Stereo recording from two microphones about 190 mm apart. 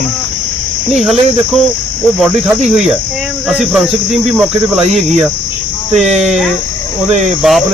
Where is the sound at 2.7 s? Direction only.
Centre (ahead or behind).